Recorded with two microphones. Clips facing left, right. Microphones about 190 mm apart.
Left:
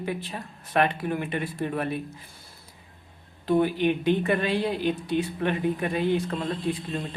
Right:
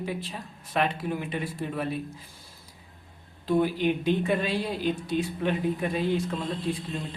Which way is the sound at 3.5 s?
60° left (ahead or behind).